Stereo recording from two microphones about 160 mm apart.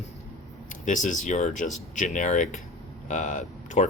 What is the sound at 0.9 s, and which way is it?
Speech, 55° left (ahead or behind).